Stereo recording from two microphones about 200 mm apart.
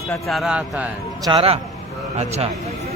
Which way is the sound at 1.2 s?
25° right (ahead or behind).